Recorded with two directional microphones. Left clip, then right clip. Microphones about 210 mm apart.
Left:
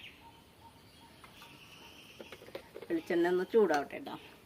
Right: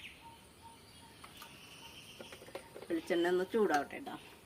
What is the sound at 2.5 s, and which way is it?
Speech, 40° left (ahead or behind).